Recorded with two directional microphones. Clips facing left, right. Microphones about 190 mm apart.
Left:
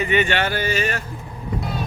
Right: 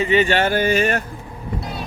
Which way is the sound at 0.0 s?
30° right (ahead or behind).